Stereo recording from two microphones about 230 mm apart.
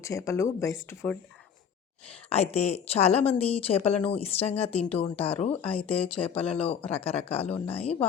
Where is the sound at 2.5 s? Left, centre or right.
Left.